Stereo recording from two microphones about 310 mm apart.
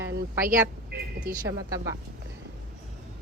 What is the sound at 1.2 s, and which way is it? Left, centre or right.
Speech, centre.